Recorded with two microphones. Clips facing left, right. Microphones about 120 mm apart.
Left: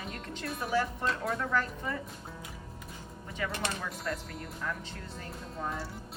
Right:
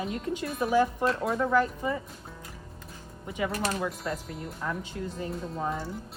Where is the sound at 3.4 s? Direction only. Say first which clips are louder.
Right 5 dB; 15° right (ahead or behind).